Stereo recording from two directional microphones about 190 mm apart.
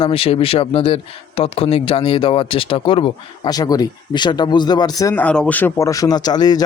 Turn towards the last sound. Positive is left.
turn(degrees=20)  # may be behind; listen again after turning